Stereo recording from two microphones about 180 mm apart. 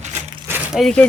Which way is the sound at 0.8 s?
5° left (ahead or behind).